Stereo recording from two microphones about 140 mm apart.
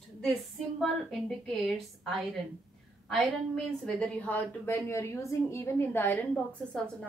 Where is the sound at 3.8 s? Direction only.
10° left (ahead or behind).